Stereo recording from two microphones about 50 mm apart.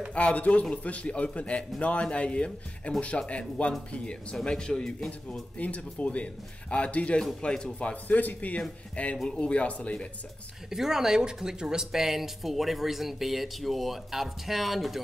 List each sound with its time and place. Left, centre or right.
0.1 s speech: left
5.6 s speech: left
7.9 s speech: left
10.7 s speech: centre